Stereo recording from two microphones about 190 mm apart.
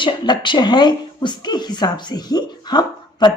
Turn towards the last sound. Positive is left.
turn(degrees=20)  # may be behind; listen again after turning